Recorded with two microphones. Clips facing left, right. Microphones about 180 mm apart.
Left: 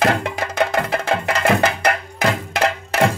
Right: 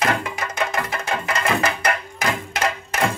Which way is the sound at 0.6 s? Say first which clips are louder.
Left 6 dB; 65° left (ahead or behind).